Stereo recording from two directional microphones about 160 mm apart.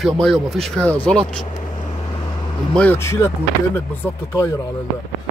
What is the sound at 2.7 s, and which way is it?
Speech, 10° left (ahead or behind).